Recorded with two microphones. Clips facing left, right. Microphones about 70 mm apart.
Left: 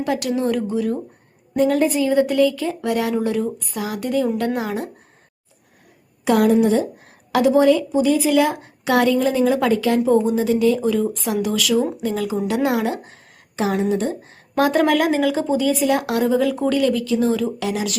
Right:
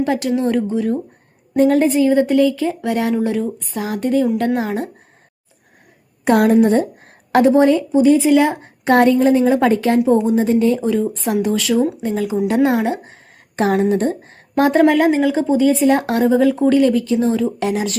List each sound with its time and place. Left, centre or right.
0.0 s a woman's voice: right
6.2 s a woman's voice: right
13.6 s a woman's voice: right